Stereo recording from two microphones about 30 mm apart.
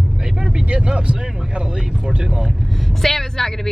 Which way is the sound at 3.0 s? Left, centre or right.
Centre.